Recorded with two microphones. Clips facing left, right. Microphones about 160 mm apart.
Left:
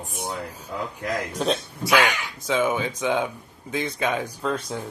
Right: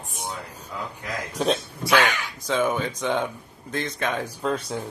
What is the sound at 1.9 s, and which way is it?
Speech, 10° left (ahead or behind).